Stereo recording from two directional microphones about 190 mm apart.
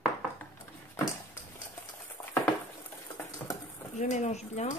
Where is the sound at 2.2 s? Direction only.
15° left (ahead or behind).